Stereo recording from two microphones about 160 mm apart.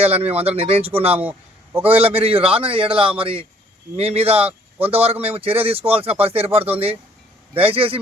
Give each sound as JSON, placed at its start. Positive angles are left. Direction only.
{"t": 0.1, "sound": "speech", "side_deg": -10}
{"t": 0.4, "sound": "a man's voice", "side_deg": -40}
{"t": 1.2, "sound": "a sound", "side_deg": -10}
{"t": 2.0, "sound": "a man's voice", "side_deg": -35}